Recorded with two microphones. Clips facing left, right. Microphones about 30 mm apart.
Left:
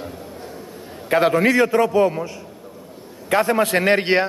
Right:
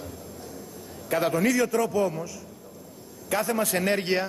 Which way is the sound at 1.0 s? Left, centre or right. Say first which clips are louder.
Left 7 dB; left.